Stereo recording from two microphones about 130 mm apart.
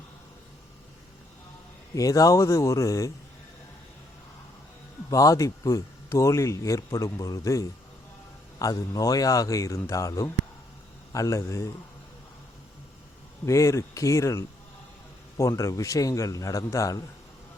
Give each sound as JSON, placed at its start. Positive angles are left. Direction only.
{"t": 2.0, "sound": "speech", "side_deg": 25}
{"t": 5.1, "sound": "speech", "side_deg": 25}
{"t": 13.4, "sound": "speech", "side_deg": 25}